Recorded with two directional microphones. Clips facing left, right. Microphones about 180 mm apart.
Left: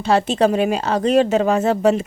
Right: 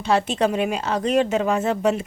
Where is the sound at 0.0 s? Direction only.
35° left (ahead or behind).